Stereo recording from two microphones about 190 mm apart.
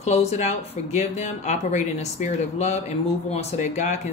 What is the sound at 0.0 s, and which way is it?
Speech, 35° left (ahead or behind).